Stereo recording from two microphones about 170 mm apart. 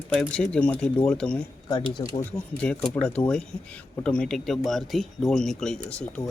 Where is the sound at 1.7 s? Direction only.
25° left (ahead or behind).